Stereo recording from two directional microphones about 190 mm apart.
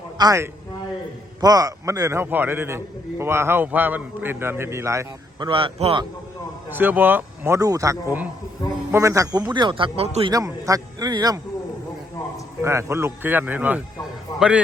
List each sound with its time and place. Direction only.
0.2 s a man's voice: 15° right (ahead or behind)
5.5 s a man's voice: 30° right (ahead or behind)
6.7 s a man's voice: 10° right (ahead or behind); by 10.3 s 30° right (ahead or behind)
10.3 s a man's voice: 20° right (ahead or behind)
12.6 s a man's voice: 15° right (ahead or behind)